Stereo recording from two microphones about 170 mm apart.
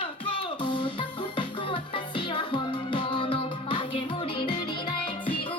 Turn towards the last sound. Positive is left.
turn(degrees=30)  # may be behind; listen again after turning